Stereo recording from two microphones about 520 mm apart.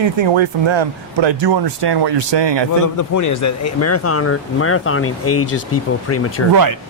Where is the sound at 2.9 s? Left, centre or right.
Left.